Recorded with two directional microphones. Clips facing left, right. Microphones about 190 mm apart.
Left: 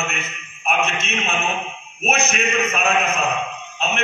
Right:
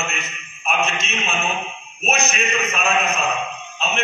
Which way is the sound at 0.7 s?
60° left (ahead or behind).